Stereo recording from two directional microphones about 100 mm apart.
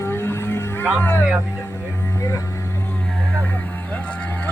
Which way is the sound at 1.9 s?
30° left (ahead or behind).